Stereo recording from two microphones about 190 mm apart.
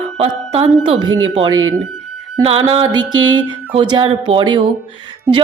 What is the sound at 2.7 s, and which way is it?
Music, 30° right (ahead or behind).